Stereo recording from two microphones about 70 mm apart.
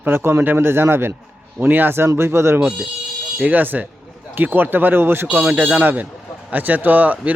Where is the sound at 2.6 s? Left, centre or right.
Centre.